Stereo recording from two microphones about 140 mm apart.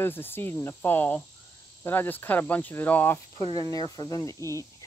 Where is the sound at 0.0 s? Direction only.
15° left (ahead or behind).